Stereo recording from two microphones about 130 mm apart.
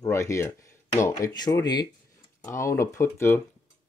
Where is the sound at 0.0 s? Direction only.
20° left (ahead or behind).